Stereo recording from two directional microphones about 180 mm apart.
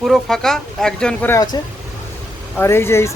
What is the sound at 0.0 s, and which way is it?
Speech, centre (ahead or behind).